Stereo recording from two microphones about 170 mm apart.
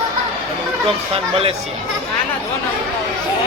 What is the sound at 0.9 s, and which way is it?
Speech, 35° right (ahead or behind).